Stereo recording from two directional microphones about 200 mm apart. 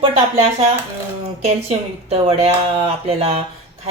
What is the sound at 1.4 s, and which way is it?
A woman's voice, 30° right (ahead or behind).